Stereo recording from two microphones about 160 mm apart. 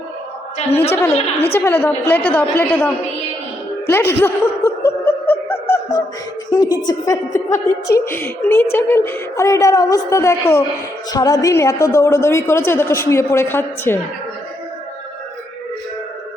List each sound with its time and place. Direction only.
0.9 s a woman's voice: 15° left (ahead or behind)
1.1 s a woman's voice: 40° left (ahead or behind)
1.5 s a woman's voice: 15° left (ahead or behind)
3.8 s snicker: 15° left (ahead or behind)
6.5 s a woman's voice: 25° left (ahead or behind)